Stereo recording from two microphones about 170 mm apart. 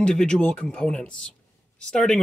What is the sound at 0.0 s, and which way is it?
Speech, 5° left (ahead or behind).